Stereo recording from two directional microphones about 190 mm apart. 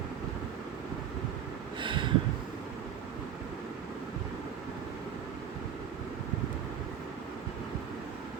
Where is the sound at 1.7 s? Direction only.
25° right (ahead or behind).